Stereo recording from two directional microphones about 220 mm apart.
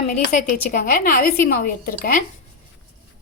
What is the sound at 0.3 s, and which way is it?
A woman's voice, 35° left (ahead or behind).